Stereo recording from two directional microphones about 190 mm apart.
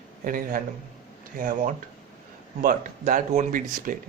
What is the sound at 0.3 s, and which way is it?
Speech, 50° right (ahead or behind).